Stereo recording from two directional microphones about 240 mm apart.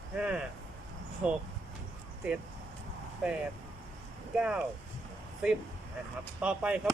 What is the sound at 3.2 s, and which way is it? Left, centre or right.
Speech, centre.